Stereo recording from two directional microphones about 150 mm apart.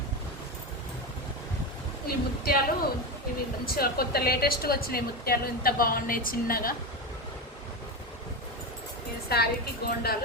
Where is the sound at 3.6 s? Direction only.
90° left; by 6.7 s 75° left (ahead or behind).